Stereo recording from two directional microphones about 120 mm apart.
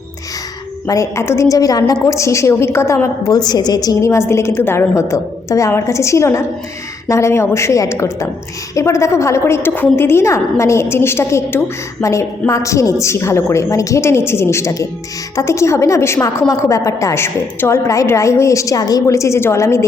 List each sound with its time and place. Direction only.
0.9 s a woman's voice: 25° left (ahead or behind)